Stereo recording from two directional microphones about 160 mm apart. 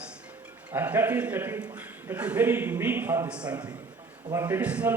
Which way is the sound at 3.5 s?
25° right (ahead or behind).